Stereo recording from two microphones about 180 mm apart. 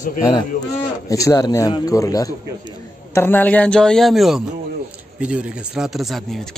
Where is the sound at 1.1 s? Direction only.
20° left (ahead or behind).